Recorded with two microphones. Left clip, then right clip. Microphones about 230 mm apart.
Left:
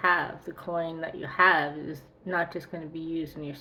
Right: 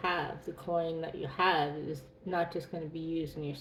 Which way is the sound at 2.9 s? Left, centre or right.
Centre.